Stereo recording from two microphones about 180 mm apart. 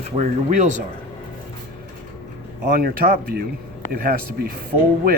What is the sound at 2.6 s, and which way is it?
Speech, 55° right (ahead or behind).